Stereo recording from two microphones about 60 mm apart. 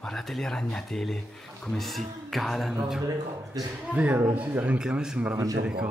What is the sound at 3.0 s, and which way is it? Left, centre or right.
Speech, right.